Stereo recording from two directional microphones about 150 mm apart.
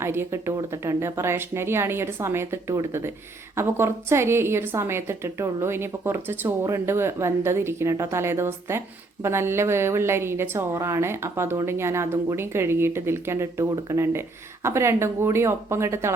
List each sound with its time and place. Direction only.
0.0 s a woman's voice: 15° right (ahead or behind)